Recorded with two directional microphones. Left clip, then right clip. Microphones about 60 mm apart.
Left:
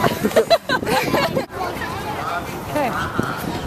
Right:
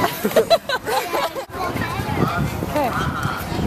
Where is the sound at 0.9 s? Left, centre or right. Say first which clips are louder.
Left 2 dB; left.